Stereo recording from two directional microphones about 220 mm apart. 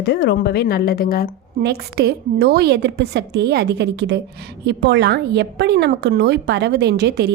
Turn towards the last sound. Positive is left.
turn(degrees=-50)  # may be behind; listen again after turning